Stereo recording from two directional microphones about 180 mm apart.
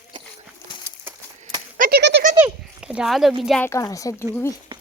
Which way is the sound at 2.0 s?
70° right (ahead or behind).